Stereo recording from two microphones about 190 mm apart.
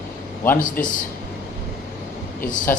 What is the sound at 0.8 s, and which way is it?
Speech, 10° left (ahead or behind).